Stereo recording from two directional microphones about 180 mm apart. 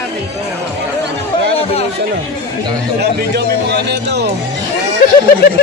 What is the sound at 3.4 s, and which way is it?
Music, 70° right (ahead or behind).